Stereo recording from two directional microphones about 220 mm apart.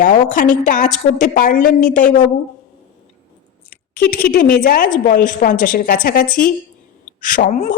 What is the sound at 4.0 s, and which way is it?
A woman's voice, 40° left (ahead or behind).